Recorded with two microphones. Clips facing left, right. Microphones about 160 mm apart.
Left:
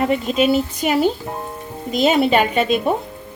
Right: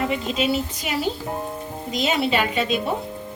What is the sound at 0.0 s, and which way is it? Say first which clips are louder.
Speech: left 6 dB; 50° left (ahead or behind).